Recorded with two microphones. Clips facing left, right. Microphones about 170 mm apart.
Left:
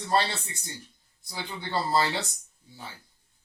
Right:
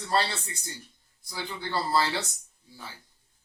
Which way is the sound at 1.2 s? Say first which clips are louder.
Right 1 dB; 20° left (ahead or behind).